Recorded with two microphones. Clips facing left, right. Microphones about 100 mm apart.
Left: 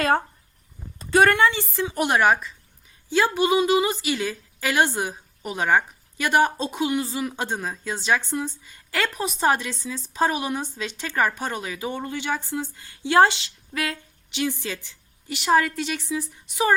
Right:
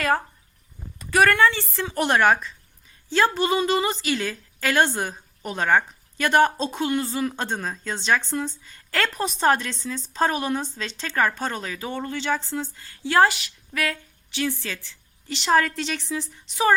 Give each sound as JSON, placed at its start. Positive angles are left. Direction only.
{"t": 0.0, "sound": "a woman's voice", "side_deg": 30}